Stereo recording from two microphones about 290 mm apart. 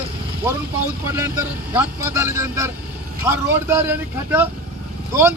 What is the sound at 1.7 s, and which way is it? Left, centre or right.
Speech, centre.